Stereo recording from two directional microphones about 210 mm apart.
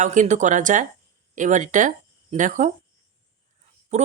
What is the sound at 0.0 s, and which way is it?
A woman's voice, 35° right (ahead or behind).